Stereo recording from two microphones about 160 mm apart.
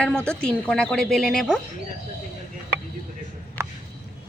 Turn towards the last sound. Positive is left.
turn(degrees=-15)  # may be behind; listen again after turning